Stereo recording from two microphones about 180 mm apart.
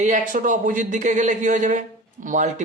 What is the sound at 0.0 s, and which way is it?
Speech, 45° right (ahead or behind).